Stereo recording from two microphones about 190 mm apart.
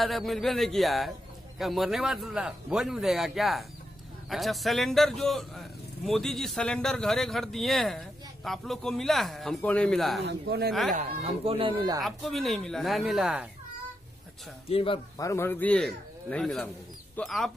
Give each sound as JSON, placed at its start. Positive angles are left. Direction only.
{"t": 0.0, "sound": "speech", "side_deg": 0}
{"t": 10.2, "sound": "speech", "side_deg": -60}
{"t": 10.9, "sound": "speech", "side_deg": -35}
{"t": 12.0, "sound": "speech", "side_deg": 0}
{"t": 14.7, "sound": "speech", "side_deg": 30}
{"t": 15.1, "sound": "speech", "side_deg": 15}